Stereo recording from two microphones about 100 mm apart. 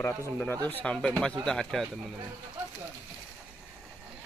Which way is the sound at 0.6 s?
10° left (ahead or behind).